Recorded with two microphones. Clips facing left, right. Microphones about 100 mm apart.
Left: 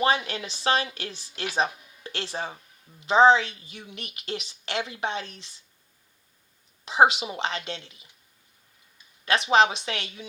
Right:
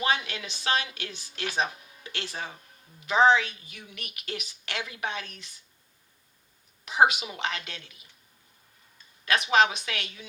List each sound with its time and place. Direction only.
0.0 s a woman's voice: 35° left (ahead or behind)
6.8 s a woman's voice: 30° left (ahead or behind)
9.2 s a woman's voice: 30° left (ahead or behind)